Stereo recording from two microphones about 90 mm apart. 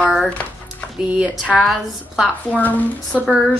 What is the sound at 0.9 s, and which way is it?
Speech, 10° right (ahead or behind).